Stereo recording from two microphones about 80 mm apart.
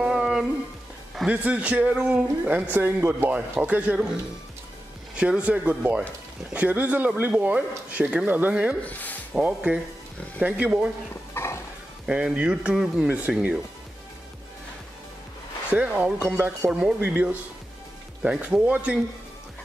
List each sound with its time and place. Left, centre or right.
0.0 s music: centre
1.3 s a man's voice: centre
5.1 s a man's voice: centre
8.8 s rub: left
9.3 s a man's voice: centre
11.3 s a sound: left
12.1 s a man's voice: centre
15.7 s a man's voice: centre